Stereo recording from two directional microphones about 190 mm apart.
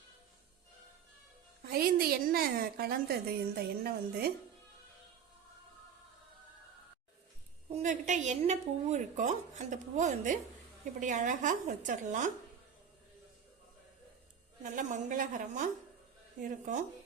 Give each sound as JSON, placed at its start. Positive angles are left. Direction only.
{"t": 1.6, "sound": "a woman's voice", "side_deg": -50}
{"t": 3.6, "sound": "music", "side_deg": -55}
{"t": 7.7, "sound": "a woman's voice", "side_deg": -40}
{"t": 14.6, "sound": "a woman's voice", "side_deg": -40}